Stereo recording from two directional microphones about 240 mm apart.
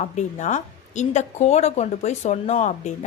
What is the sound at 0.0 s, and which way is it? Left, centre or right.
A woman's voice, left.